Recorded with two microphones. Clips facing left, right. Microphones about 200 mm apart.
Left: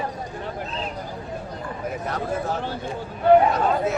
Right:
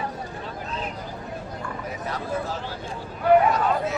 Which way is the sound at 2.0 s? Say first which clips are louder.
Left 2 dB; 60° left (ahead or behind).